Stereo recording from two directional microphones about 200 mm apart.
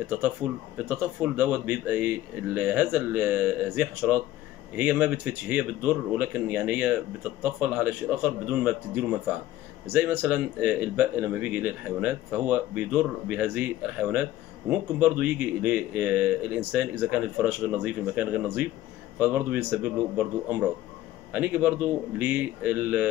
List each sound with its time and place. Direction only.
0.2 s speech: 5° right (ahead or behind)